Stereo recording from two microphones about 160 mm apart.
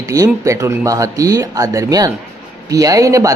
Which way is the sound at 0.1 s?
20° right (ahead or behind).